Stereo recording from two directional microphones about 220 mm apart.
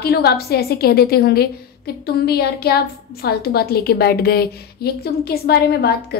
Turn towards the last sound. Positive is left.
turn(degrees=45)  # may be behind; listen again after turning